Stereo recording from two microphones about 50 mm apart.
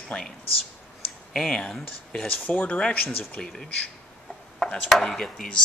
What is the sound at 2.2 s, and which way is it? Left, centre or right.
Speech, left.